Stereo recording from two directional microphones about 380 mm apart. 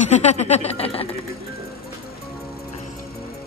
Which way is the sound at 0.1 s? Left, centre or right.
Centre.